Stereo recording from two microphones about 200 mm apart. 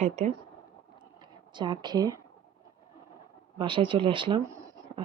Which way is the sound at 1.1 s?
25° right (ahead or behind).